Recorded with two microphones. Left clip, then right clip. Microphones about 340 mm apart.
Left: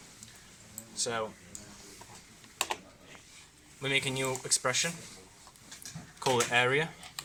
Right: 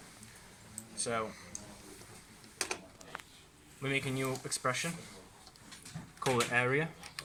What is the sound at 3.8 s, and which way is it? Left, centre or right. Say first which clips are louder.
Speech: left 4 dB; left.